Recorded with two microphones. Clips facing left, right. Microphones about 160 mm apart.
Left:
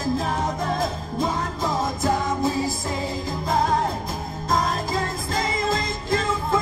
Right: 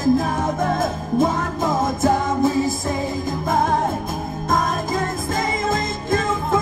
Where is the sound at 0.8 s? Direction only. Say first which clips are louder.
Right 6 dB; 50° right (ahead or behind).